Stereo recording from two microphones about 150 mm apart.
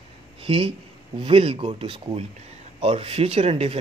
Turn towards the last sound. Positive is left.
turn(degrees=-40)  # may be behind; listen again after turning